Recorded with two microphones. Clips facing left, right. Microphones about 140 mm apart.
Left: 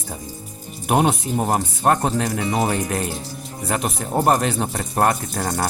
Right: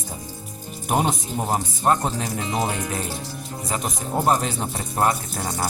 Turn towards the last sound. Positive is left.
turn(degrees=60)  # may be behind; listen again after turning